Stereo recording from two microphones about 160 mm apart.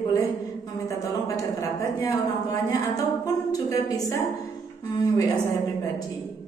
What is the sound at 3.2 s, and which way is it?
Speech, 20° left (ahead or behind).